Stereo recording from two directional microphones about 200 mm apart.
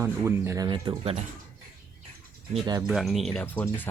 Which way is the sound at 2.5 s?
20° right (ahead or behind).